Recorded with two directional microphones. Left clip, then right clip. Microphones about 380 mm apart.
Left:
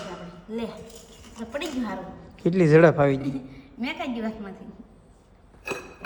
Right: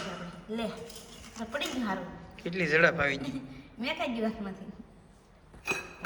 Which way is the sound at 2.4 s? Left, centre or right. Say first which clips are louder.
Left 8 dB; left.